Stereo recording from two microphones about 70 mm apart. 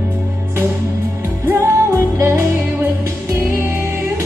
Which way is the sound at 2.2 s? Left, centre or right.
Right.